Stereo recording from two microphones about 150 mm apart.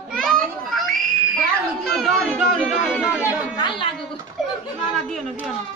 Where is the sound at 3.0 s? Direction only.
10° right (ahead or behind).